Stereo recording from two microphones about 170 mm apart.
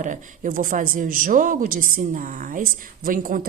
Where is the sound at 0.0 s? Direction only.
50° right (ahead or behind).